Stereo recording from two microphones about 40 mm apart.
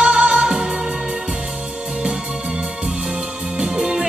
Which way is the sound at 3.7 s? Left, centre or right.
Centre.